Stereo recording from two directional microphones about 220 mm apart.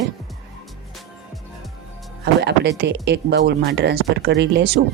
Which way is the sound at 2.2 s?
50° right (ahead or behind).